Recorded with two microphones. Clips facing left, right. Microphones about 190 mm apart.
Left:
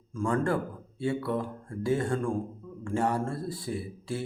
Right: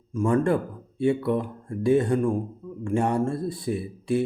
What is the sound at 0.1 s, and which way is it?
Speech, 20° right (ahead or behind).